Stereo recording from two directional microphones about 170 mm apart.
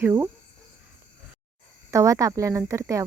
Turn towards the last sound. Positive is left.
turn(degrees=-20)  # may be behind; listen again after turning